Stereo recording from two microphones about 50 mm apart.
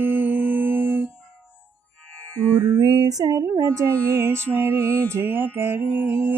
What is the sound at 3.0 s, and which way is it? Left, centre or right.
Speech, right.